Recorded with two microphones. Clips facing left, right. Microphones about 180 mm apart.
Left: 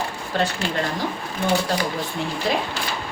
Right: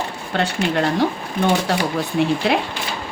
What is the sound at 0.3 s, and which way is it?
Speech, 65° right (ahead or behind).